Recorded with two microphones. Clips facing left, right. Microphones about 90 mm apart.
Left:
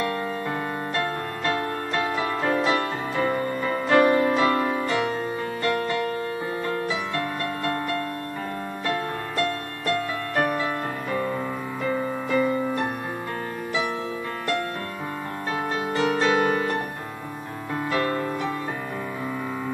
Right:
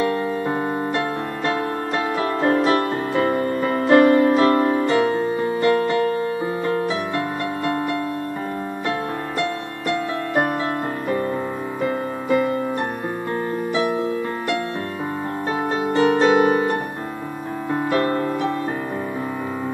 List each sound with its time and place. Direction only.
0.0 s music: 30° right (ahead or behind)
3.2 s music: 45° right (ahead or behind); by 6.2 s 25° right (ahead or behind)
15.9 s music: 25° right (ahead or behind)
17.8 s music: 40° right (ahead or behind)